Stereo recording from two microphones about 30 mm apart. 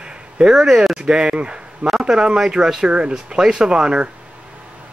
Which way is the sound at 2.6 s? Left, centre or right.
Right.